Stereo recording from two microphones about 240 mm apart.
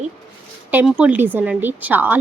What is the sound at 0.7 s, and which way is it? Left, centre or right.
A woman's voice, centre.